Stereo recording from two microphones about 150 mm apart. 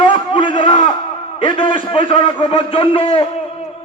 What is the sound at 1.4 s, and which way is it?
A man's voice, 35° left (ahead or behind).